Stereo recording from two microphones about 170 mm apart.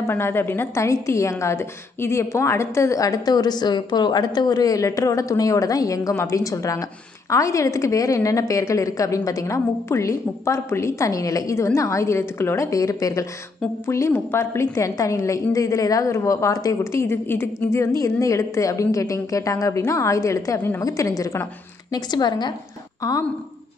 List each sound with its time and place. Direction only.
0.0 s a woman's voice: 15° left (ahead or behind)